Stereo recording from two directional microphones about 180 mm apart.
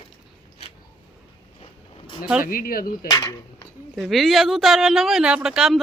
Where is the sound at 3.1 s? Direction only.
20° left (ahead or behind).